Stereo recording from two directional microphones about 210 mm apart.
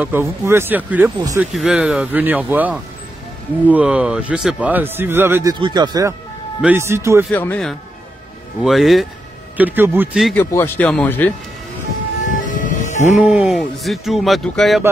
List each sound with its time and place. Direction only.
0.0 s a man's voice: 10° right (ahead or behind)
7.2 s a man's voice: 5° left (ahead or behind)
10.4 s speech: 10° left (ahead or behind)
12.3 s siren: 40° left (ahead or behind)
13.5 s speech: centre (ahead or behind)